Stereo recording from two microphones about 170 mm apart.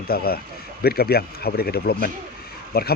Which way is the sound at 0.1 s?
65° left (ahead or behind).